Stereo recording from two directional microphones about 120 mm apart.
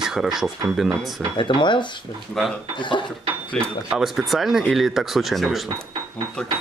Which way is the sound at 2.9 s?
40° left (ahead or behind).